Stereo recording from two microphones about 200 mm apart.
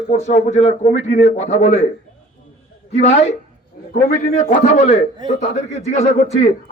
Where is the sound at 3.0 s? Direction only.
35° left (ahead or behind).